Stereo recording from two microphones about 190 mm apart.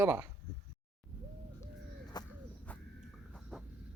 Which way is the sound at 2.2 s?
20° left (ahead or behind).